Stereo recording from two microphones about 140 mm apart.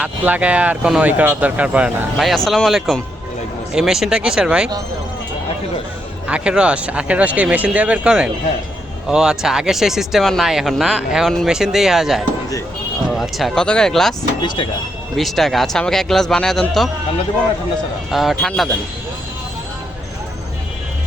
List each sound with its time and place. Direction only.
0.0 s speech: 10° right (ahead or behind)
6.2 s speech: 10° right (ahead or behind)
14.4 s speech: 35° left (ahead or behind)
15.1 s speech: centre (ahead or behind)
18.1 s speech: centre (ahead or behind)